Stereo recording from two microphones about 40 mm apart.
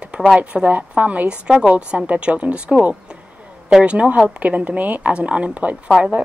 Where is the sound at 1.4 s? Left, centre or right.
Right.